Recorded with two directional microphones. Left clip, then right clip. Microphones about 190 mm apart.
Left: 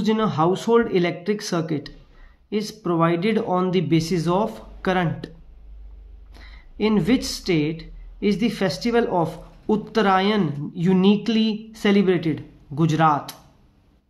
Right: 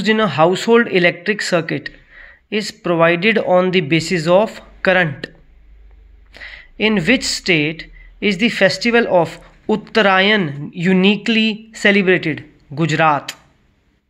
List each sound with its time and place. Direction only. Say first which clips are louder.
0.0 s speech: right 7 dB; 30° right (ahead or behind)
6.3 s speech: right 8 dB; 30° right (ahead or behind)